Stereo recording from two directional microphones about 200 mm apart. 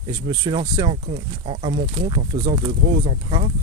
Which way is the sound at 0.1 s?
20° right (ahead or behind).